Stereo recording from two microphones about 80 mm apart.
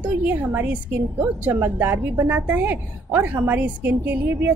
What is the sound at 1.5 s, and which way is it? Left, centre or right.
A woman's voice, right.